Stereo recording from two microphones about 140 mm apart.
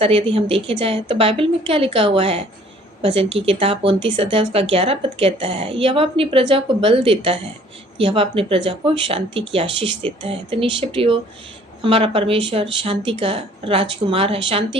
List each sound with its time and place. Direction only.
0.0 s a woman's voice: 40° right (ahead or behind)